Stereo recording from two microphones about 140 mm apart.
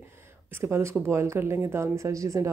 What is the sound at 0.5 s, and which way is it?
A woman's voice, 20° right (ahead or behind).